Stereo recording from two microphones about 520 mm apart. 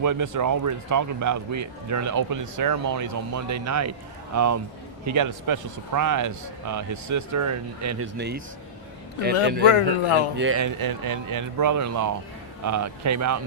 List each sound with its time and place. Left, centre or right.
0.0 s speech: right
9.4 s speech: centre
9.6 s a man's voice: left
10.3 s speech: right
10.8 s speech: right